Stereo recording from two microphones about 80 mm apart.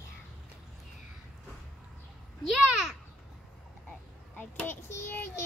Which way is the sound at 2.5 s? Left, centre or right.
Centre.